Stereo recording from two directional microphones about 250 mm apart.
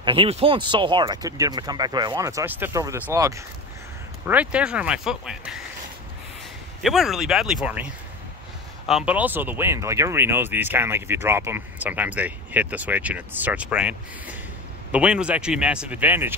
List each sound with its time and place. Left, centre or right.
0.0 s speech: right; by 5.6 s centre
6.8 s speech: centre